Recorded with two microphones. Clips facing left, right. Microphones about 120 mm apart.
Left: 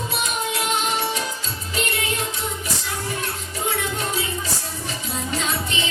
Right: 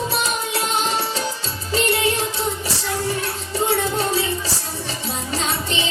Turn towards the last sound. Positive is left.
turn(degrees=-30)  # may be behind; listen again after turning